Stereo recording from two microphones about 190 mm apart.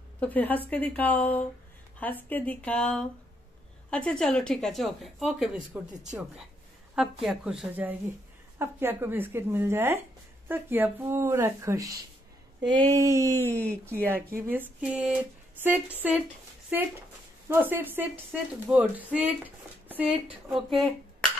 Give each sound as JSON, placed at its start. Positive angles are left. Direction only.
{"t": 0.2, "sound": "speech", "side_deg": 10}
{"t": 7.0, "sound": "speech", "side_deg": -5}
{"t": 13.4, "sound": "speech", "side_deg": 10}
{"t": 14.0, "sound": "speech", "side_deg": -10}